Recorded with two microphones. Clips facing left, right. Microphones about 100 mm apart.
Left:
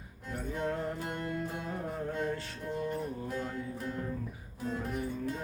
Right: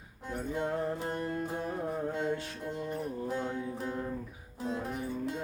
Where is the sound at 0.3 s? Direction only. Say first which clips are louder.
Right 1 dB; 20° right (ahead or behind).